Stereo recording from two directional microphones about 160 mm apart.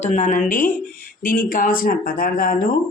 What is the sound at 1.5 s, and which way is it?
Speech, 60° left (ahead or behind).